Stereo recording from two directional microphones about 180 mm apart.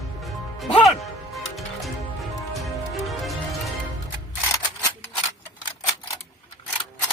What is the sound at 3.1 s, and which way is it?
Music, centre (ahead or behind).